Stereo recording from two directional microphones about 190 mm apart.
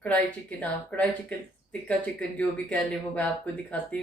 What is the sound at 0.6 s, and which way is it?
Speech, 10° left (ahead or behind).